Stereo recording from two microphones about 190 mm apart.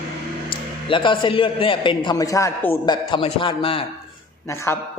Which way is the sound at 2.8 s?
25° left (ahead or behind).